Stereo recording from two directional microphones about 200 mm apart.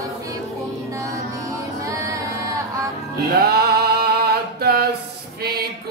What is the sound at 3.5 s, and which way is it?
Music, 50° right (ahead or behind).